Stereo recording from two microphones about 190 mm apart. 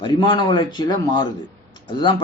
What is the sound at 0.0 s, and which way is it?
Speech, 25° left (ahead or behind).